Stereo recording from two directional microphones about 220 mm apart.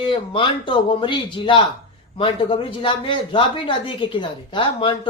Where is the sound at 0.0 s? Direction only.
20° left (ahead or behind).